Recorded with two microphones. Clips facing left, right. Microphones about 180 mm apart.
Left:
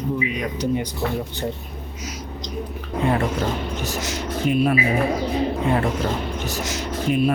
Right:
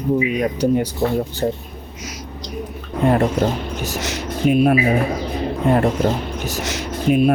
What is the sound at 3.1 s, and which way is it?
Speech, 45° right (ahead or behind).